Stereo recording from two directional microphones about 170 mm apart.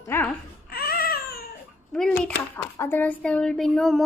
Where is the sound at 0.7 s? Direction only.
65° left (ahead or behind).